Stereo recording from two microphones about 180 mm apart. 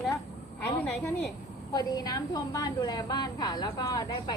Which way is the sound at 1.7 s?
20° left (ahead or behind).